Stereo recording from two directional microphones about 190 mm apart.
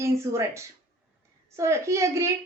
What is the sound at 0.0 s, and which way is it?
A man's voice, 15° right (ahead or behind).